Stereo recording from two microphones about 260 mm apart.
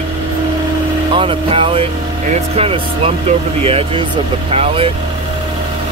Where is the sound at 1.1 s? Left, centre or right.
Right.